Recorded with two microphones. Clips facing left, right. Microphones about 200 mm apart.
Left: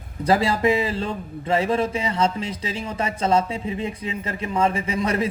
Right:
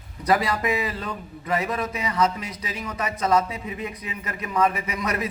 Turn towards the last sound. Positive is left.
turn(degrees=30)  # may be behind; listen again after turning